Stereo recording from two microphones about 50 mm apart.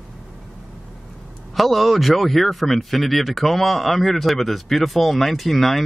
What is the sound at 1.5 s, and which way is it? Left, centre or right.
Speech, centre.